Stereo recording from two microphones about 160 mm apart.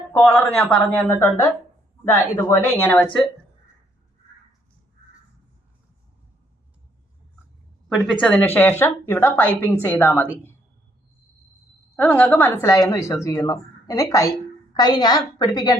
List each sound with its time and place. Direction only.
0.1 s a woman's voice: 10° left (ahead or behind)
8.2 s a woman's voice: 5° left (ahead or behind)
11.9 s a woman's voice: 10° left (ahead or behind)